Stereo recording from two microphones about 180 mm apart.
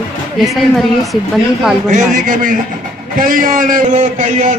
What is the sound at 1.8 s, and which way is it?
A man's voice, 45° right (ahead or behind).